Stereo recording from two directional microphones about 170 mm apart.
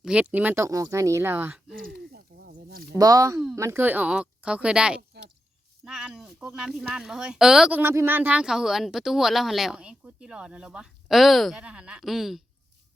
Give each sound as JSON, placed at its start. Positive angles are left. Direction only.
{"t": 0.0, "sound": "speech", "side_deg": -5}
{"t": 1.9, "sound": "a sound", "side_deg": -75}
{"t": 3.0, "sound": "speech", "side_deg": -20}